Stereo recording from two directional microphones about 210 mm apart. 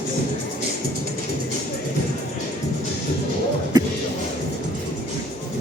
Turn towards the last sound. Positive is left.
turn(degrees=-20)  # may be behind; listen again after turning